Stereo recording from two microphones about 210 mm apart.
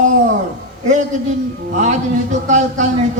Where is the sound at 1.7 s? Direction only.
35° right (ahead or behind).